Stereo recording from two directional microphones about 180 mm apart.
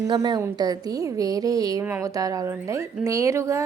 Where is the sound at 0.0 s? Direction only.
20° right (ahead or behind).